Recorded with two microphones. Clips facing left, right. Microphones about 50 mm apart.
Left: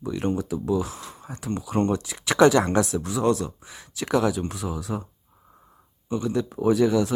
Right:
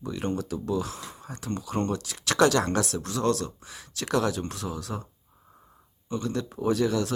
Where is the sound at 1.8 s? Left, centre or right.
Left.